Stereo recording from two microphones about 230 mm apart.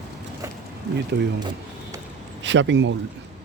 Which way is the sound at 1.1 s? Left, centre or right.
Right.